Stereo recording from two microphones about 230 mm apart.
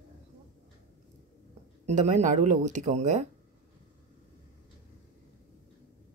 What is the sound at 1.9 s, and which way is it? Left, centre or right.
Speech, right.